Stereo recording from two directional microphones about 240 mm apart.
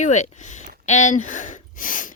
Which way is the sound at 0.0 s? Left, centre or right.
Left.